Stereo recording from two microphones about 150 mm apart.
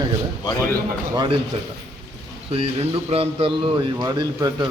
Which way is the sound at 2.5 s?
40° right (ahead or behind).